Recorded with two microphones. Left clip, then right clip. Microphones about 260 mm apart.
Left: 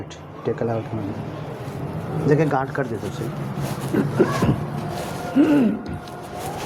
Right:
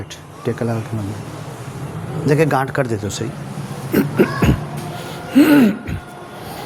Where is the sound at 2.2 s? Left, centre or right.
Right.